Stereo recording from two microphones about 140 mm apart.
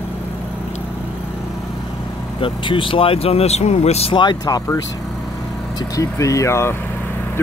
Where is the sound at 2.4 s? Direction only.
35° left (ahead or behind).